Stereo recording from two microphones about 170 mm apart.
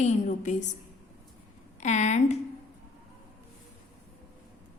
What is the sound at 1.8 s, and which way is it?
Speech, 45° left (ahead or behind).